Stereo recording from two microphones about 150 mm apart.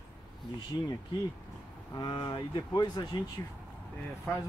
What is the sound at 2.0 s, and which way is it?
Speech, 30° left (ahead or behind).